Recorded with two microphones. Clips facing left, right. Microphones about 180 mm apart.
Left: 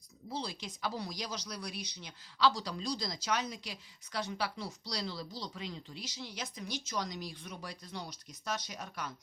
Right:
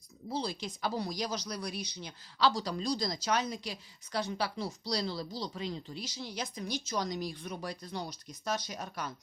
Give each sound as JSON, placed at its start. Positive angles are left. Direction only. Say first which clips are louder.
{"t": 0.3, "sound": "speech", "louder": "right 4 dB", "side_deg": -40}